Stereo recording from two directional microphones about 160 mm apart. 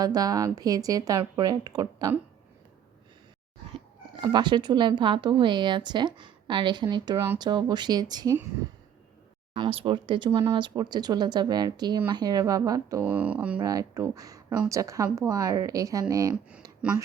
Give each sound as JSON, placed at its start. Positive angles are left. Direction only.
{"t": 0.0, "sound": "speech", "side_deg": -25}
{"t": 3.7, "sound": "speech", "side_deg": -30}
{"t": 9.6, "sound": "speech", "side_deg": -35}
{"t": 13.1, "sound": "speech", "side_deg": -10}
{"t": 13.6, "sound": "speech", "side_deg": -20}
{"t": 16.3, "sound": "speech", "side_deg": -5}